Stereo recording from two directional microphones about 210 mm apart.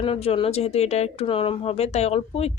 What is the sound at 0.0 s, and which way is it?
Speech, 25° left (ahead or behind).